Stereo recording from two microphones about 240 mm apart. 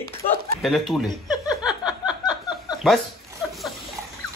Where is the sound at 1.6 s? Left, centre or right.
Centre.